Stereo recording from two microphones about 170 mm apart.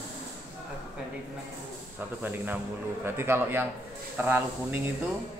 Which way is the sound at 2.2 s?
10° right (ahead or behind).